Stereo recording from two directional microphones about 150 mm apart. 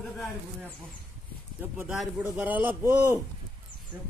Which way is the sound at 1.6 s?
15° right (ahead or behind).